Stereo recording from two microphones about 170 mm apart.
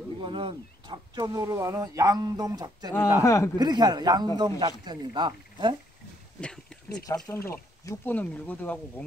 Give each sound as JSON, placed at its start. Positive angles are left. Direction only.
{"t": 0.2, "sound": "speech", "side_deg": -30}
{"t": 3.2, "sound": "speech", "side_deg": 20}
{"t": 3.5, "sound": "speech", "side_deg": -25}
{"t": 6.4, "sound": "a sound", "side_deg": 5}
{"t": 7.2, "sound": "speech", "side_deg": 15}